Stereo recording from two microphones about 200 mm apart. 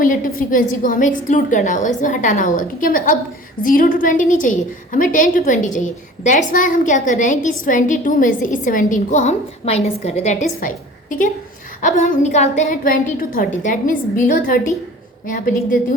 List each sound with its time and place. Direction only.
0.0 s a woman's voice: 45° left (ahead or behind)